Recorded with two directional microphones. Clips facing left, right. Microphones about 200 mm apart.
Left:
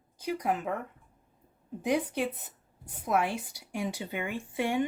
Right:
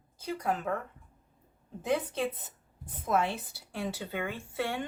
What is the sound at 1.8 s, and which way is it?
Speech, 15° left (ahead or behind).